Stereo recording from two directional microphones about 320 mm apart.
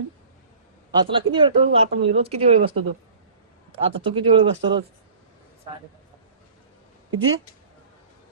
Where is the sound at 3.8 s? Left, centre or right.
Centre.